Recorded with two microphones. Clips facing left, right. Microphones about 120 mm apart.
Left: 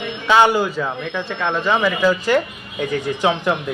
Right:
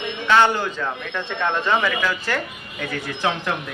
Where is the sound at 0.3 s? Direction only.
15° left (ahead or behind).